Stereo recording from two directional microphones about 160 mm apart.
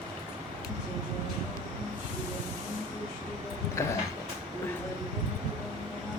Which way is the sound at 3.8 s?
15° left (ahead or behind).